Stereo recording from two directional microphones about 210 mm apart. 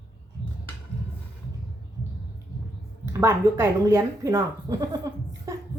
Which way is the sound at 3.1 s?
15° right (ahead or behind).